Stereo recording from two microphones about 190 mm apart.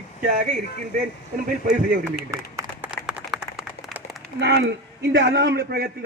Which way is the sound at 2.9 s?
Centre (ahead or behind).